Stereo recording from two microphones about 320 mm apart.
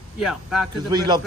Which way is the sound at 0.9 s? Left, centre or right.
Centre.